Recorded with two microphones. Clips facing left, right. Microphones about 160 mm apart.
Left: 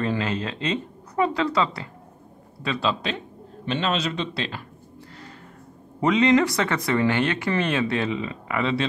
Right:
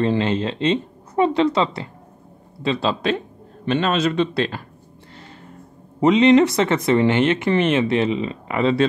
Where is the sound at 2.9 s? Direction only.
50° right (ahead or behind).